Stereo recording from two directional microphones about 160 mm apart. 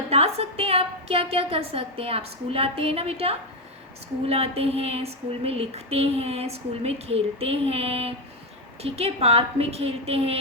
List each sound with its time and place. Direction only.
0.1 s female singing: 40° right (ahead or behind)